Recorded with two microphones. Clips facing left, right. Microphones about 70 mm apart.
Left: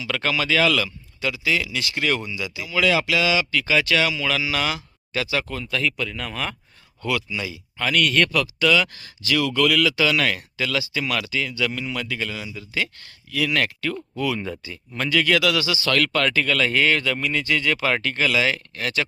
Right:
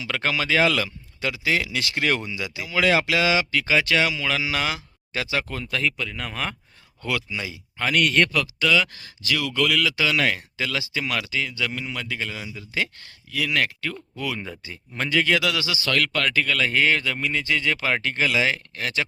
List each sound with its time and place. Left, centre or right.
0.1 s speech: right
6.0 s speech: centre
7.0 s speech: right
7.9 s speech: centre
13.3 s speech: centre
14.6 s speech: centre